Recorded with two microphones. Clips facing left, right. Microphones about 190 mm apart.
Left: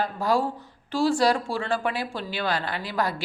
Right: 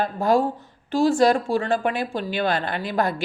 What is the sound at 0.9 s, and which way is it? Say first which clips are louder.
Speech: right 4 dB; 20° right (ahead or behind).